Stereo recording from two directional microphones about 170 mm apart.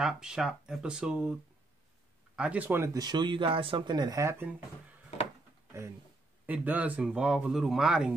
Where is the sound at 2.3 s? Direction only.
5° right (ahead or behind).